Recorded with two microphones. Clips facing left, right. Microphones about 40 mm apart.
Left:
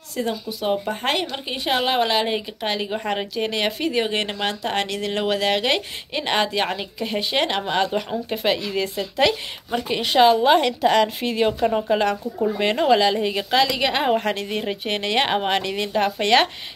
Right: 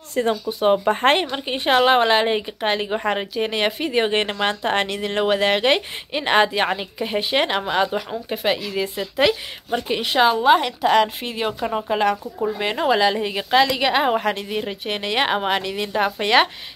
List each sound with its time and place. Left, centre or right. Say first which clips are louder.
0.2 s speech: right 4 dB; right
0.5 s speech: right 6 dB; right
1.9 s a woman's voice: right 4 dB; centre